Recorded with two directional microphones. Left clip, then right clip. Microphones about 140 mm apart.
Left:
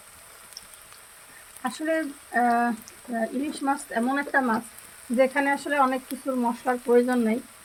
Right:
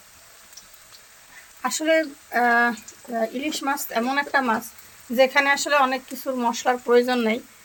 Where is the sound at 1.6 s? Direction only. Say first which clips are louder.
Right 6 dB; 20° right (ahead or behind).